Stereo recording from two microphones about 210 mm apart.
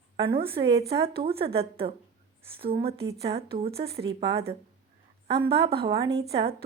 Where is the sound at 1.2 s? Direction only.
25° right (ahead or behind).